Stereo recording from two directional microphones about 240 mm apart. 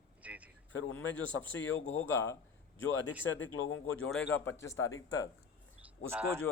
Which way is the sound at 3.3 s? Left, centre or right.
Left.